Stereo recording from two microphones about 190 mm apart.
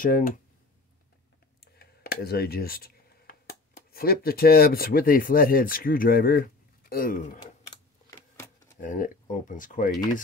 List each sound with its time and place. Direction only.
0.0 s speech: 45° left (ahead or behind)
1.6 s speech: 55° left (ahead or behind)
8.1 s a sound: 10° left (ahead or behind)
8.8 s speech: 45° left (ahead or behind)